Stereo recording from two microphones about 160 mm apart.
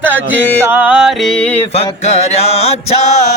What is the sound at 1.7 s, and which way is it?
Mantra, 40° left (ahead or behind).